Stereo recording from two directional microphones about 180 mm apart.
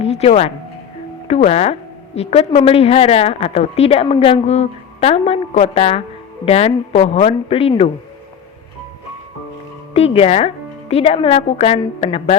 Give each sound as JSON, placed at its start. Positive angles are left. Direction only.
{"t": 0.0, "sound": "a woman's voice", "side_deg": 35}
{"t": 9.9, "sound": "a woman's voice", "side_deg": 35}